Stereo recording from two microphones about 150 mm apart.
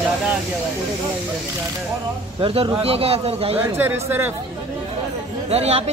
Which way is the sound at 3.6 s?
15° right (ahead or behind).